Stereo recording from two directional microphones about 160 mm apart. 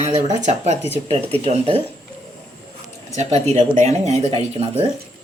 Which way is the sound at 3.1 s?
45° right (ahead or behind).